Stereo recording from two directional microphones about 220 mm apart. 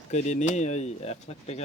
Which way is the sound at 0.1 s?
30° left (ahead or behind).